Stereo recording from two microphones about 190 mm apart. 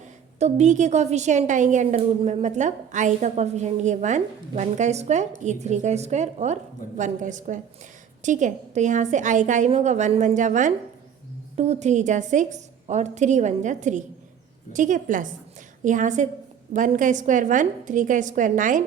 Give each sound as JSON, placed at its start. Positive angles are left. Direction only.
{"t": 0.3, "sound": "a woman's voice", "side_deg": -35}